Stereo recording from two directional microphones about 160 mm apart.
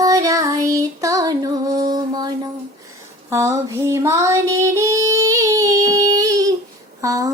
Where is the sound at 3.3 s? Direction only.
20° right (ahead or behind).